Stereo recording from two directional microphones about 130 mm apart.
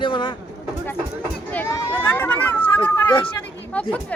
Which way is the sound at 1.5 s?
15° left (ahead or behind).